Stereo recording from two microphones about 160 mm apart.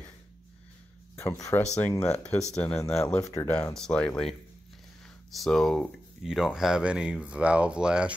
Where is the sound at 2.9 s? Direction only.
5° left (ahead or behind).